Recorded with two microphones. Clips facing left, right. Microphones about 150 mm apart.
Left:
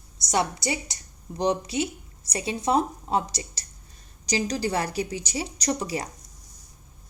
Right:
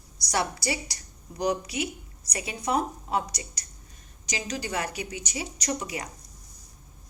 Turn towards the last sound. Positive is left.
turn(degrees=35)  # may be behind; listen again after turning